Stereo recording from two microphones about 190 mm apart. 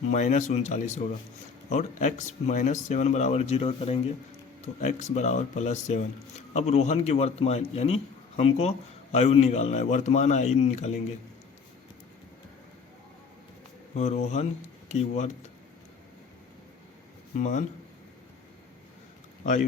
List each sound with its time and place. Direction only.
0.1 s speech: 40° left (ahead or behind)
13.9 s speech: 35° left (ahead or behind)
17.3 s speech: 40° left (ahead or behind)